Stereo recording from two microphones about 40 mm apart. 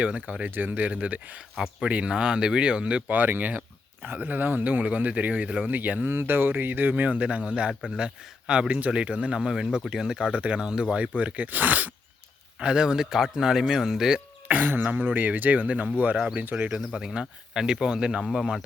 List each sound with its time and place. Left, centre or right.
0.0 s speech: right
0.4 s speech: right
3.1 s speech: right
4.6 s speech: right
6.1 s speech: right
6.9 s speech: right
9.5 s a man's voice: centre
10.3 s speech: right
11.2 s speech: right
12.5 s a man's voice: right
14.4 s speech: right
16.6 s speech: centre